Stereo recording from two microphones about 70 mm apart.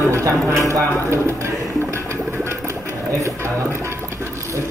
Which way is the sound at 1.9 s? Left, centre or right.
Right.